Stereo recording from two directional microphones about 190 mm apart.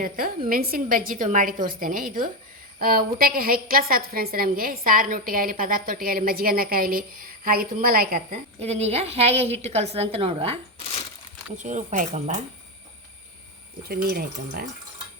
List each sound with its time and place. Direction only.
0.0 s a woman's voice: 50° right (ahead or behind)
8.5 s a woman's voice: 35° right (ahead or behind)
11.5 s a woman's voice: 40° right (ahead or behind)
13.8 s a woman's voice: 50° right (ahead or behind)